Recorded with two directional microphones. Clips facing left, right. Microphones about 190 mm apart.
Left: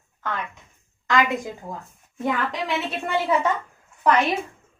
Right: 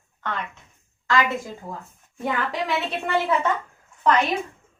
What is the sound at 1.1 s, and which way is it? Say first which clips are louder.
Speech: left 1 dB; 15° left (ahead or behind).